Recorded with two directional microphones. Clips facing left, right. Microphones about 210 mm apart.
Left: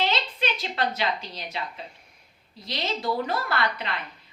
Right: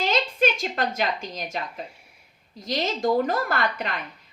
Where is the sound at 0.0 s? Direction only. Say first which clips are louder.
Right 5 dB; 45° right (ahead or behind).